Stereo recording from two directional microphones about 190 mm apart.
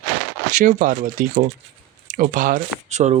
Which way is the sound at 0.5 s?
45° right (ahead or behind).